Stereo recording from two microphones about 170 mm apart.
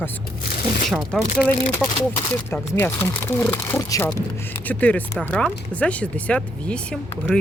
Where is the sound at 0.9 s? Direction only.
Centre (ahead or behind).